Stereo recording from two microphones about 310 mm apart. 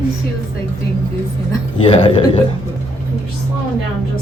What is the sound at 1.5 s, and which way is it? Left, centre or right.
Speech, centre.